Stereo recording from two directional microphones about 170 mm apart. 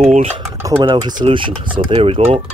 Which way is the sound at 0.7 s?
30° right (ahead or behind).